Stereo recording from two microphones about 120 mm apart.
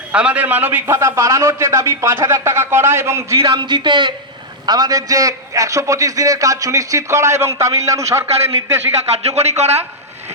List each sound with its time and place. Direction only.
0.1 s a man's voice: 10° right (ahead or behind)
3.4 s a man's voice: 40° right (ahead or behind); by 8.8 s 25° right (ahead or behind)
9.1 s speech: 60° right (ahead or behind)